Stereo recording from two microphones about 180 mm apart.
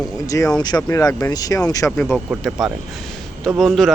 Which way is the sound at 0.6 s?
20° left (ahead or behind).